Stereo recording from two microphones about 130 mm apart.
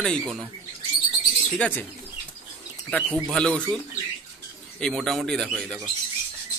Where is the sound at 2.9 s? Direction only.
10° left (ahead or behind).